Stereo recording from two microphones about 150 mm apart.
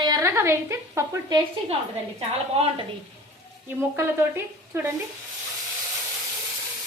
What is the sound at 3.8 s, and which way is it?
A woman's voice, 15° right (ahead or behind).